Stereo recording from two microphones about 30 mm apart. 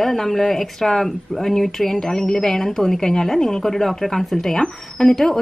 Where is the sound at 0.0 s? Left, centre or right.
Centre.